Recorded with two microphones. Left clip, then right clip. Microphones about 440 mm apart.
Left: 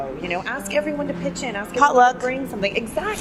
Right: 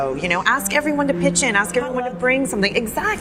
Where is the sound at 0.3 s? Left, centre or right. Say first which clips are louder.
Right 8 dB; right.